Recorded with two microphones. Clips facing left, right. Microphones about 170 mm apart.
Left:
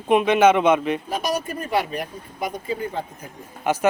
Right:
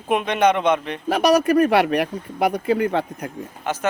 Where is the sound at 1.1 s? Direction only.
70° right (ahead or behind).